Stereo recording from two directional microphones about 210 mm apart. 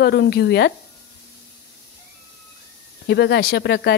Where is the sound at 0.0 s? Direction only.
50° left (ahead or behind).